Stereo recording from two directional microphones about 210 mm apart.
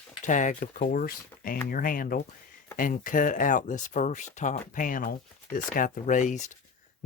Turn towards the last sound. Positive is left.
turn(degrees=35)  # may be behind; listen again after turning